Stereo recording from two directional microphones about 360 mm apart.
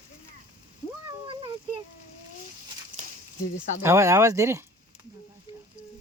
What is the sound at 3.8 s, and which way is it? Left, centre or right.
Speech, centre.